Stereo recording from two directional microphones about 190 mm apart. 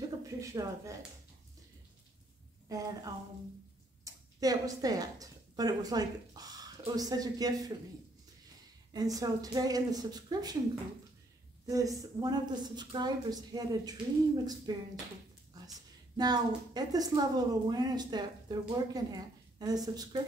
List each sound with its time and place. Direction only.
0.2 s speech: 15° right (ahead or behind)
2.7 s a woman's voice: 20° right (ahead or behind)
8.9 s a woman's voice: 20° right (ahead or behind)
11.6 s a woman's voice: 20° right (ahead or behind)
15.5 s a sound: 20° right (ahead or behind)
16.2 s a woman's voice: 20° right (ahead or behind)